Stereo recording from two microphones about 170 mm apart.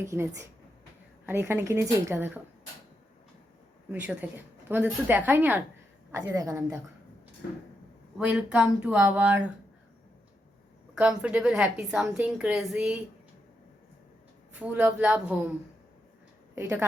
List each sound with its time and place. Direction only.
0.0 s a woman's voice: 15° right (ahead or behind)
3.9 s a woman's voice: 10° right (ahead or behind)
8.2 s a woman's voice: 5° right (ahead or behind)
10.9 s a woman's voice: 5° right (ahead or behind)
14.6 s a woman's voice: 10° right (ahead or behind)
16.6 s a woman's voice: 15° right (ahead or behind)